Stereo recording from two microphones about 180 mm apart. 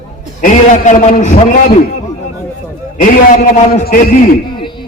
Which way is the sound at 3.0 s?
50° left (ahead or behind).